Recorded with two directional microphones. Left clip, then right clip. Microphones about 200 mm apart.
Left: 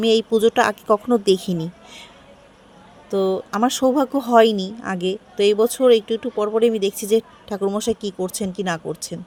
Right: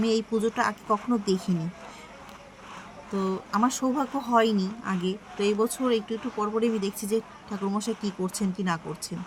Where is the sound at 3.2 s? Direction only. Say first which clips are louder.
Left 7 dB; 35° left (ahead or behind).